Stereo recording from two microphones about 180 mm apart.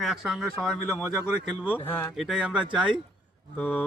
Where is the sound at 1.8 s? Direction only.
10° left (ahead or behind).